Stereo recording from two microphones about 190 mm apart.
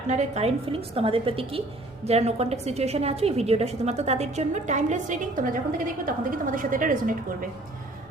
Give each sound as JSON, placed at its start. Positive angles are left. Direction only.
{"t": 0.1, "sound": "a woman's voice", "side_deg": -35}